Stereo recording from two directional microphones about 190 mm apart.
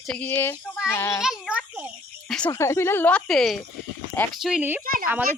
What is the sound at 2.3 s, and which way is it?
Speech, 10° left (ahead or behind).